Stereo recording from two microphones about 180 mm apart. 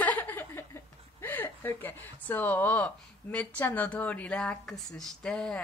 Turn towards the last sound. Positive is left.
turn(degrees=5)  # may be behind; listen again after turning